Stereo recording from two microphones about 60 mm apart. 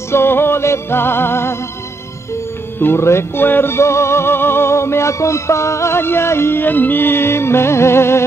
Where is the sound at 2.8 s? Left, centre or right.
Left.